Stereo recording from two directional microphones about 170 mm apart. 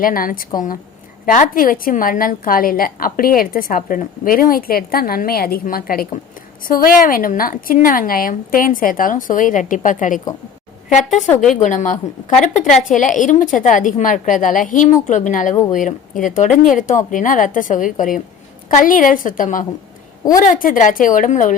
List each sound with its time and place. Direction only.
0.0 s a woman's voice: 55° left (ahead or behind)